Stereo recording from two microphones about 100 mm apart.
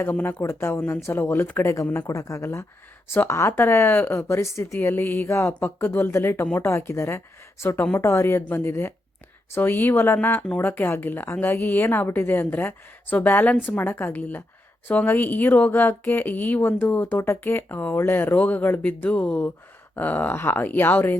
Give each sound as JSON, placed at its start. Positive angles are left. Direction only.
{"t": 0.0, "sound": "speech", "side_deg": 20}